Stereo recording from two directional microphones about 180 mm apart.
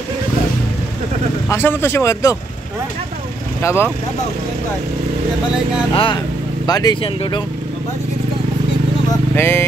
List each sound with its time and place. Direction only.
1.5 s speech: 10° left (ahead or behind)
3.6 s speech: 15° left (ahead or behind)
5.9 s speech: 25° left (ahead or behind)
9.3 s speech: 15° left (ahead or behind)